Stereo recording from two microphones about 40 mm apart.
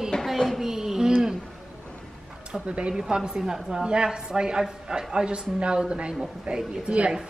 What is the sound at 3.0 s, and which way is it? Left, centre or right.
Speech, centre.